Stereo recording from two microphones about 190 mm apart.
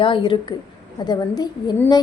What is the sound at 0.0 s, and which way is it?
A woman's voice, 25° left (ahead or behind).